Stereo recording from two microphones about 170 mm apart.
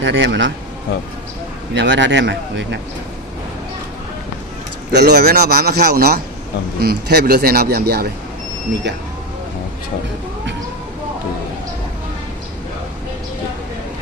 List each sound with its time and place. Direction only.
0.0 s speech: 90° right
1.7 s speech: 90° right
4.9 s a man's voice: 80° right